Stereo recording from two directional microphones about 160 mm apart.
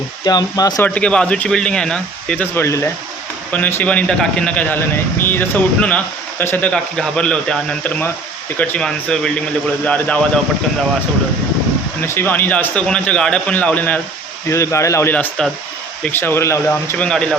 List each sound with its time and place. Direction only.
0.3 s speech: 25° left (ahead or behind)
0.8 s speech: 5° left (ahead or behind)
12.0 s speech: 15° left (ahead or behind)